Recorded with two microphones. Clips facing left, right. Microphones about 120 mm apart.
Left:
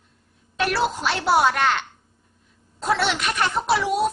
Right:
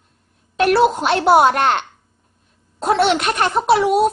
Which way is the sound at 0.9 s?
55° right (ahead or behind).